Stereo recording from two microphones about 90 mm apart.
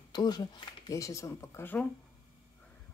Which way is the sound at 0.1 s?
50° left (ahead or behind).